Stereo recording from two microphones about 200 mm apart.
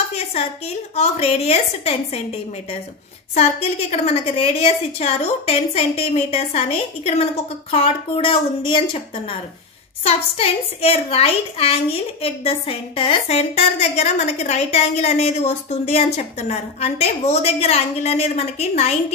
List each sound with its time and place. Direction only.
0.1 s a sound: 30° left (ahead or behind)
0.9 s a woman's voice: 30° left (ahead or behind)
3.3 s a woman's voice: 30° left (ahead or behind)